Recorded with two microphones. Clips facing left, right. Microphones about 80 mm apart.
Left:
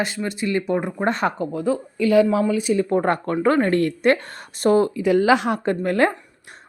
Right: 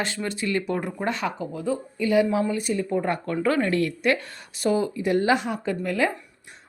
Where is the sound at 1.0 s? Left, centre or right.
Left.